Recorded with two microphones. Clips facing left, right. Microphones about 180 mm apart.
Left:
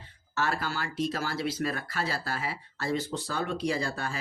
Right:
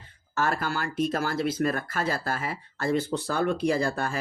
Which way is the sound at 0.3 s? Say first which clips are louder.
Right 3 dB; 50° right (ahead or behind).